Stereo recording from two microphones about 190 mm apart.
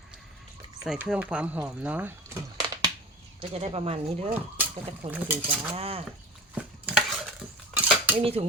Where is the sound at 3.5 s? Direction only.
30° right (ahead or behind).